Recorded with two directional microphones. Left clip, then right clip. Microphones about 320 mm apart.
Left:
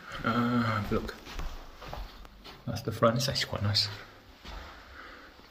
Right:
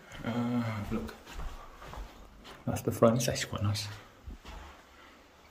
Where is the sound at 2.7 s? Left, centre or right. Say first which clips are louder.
Right 3 dB; right.